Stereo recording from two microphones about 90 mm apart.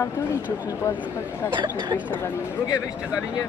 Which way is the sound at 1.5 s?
50° right (ahead or behind).